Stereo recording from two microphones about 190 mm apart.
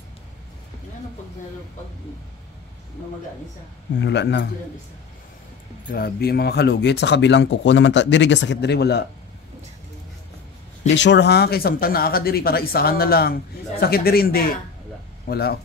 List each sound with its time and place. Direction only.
4.0 s speech: 65° left (ahead or behind)
5.9 s speech: 50° left (ahead or behind)
11.0 s speech: 65° left (ahead or behind)